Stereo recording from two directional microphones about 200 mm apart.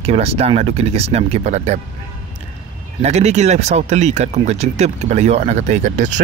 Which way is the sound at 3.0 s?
35° right (ahead or behind).